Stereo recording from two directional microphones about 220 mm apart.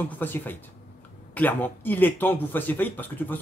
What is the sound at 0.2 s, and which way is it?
Speech, 10° left (ahead or behind).